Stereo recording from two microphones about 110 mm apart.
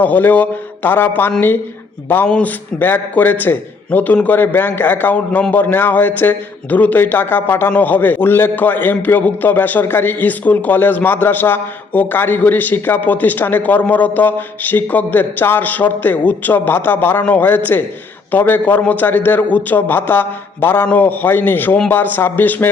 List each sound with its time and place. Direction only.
0.0 s a man's voice: 15° left (ahead or behind)